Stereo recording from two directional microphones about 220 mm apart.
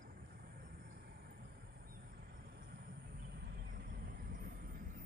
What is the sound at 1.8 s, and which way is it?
Vehicle, 45° right (ahead or behind).